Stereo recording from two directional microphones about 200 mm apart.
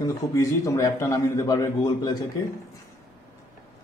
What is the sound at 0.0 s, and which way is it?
A man's voice, 15° left (ahead or behind).